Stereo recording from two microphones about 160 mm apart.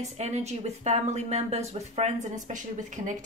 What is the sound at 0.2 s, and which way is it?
A woman's voice, 45° right (ahead or behind).